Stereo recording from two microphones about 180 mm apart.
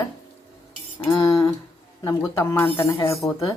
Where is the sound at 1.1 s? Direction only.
15° left (ahead or behind).